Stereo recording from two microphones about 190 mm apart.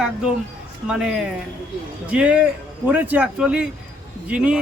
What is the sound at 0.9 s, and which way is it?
Speech, 5° right (ahead or behind).